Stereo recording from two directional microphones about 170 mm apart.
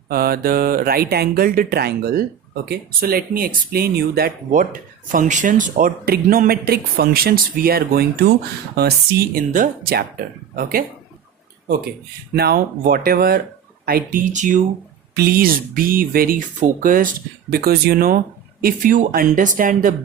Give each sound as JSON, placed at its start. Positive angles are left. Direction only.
{"t": 0.1, "sound": "speech", "side_deg": -60}
{"t": 12.3, "sound": "speech", "side_deg": -65}
{"t": 15.1, "sound": "speech", "side_deg": -60}